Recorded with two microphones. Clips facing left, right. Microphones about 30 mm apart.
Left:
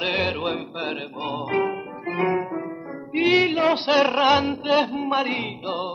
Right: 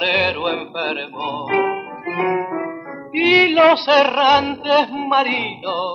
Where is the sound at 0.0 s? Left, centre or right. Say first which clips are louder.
Right 6 dB; right.